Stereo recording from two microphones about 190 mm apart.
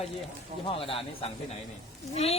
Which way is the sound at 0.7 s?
30° left (ahead or behind).